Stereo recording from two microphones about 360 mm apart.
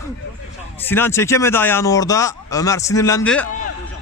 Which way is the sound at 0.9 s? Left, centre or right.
Centre.